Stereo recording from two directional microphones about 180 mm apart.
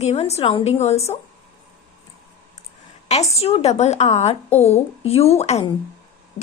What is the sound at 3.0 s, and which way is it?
A woman's voice, 35° left (ahead or behind).